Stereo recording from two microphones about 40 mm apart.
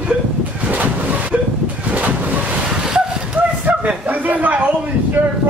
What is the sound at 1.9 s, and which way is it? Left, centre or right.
Wind noise, right.